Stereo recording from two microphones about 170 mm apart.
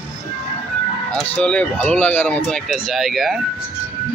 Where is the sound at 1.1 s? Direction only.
5° left (ahead or behind).